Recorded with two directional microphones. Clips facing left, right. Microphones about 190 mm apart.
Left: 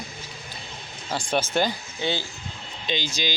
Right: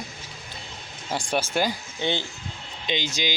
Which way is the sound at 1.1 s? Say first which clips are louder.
Left 1 dB; 10° right (ahead or behind).